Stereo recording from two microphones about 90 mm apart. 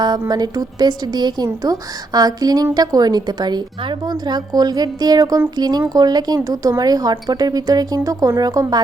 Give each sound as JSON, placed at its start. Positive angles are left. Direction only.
{"t": 0.0, "sound": "speech", "side_deg": -50}